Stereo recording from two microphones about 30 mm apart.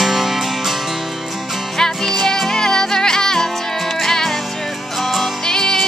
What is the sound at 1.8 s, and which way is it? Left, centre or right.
Music, centre.